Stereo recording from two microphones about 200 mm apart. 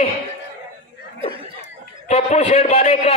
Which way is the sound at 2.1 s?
35° left (ahead or behind).